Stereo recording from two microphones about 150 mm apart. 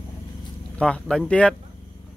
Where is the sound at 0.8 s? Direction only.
5° left (ahead or behind).